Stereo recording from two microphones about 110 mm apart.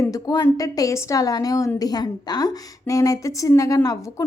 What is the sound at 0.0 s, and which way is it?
A woman's voice, 30° left (ahead or behind).